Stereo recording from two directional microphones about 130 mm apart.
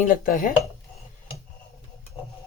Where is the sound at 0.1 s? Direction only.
90° left.